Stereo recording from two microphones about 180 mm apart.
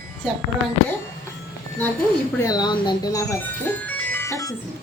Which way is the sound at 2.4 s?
20° left (ahead or behind).